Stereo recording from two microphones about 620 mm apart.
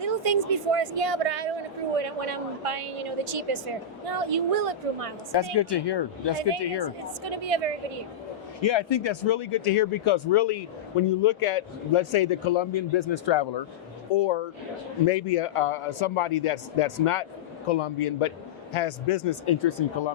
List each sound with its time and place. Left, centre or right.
0.0 s a woman's voice: right
2.0 s a woman's voice: right
5.3 s speech: left
7.3 s a woman's voice: right
8.6 s speech: left
14.1 s speech: left